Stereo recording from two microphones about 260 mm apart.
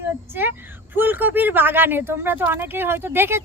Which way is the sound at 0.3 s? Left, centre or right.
Centre.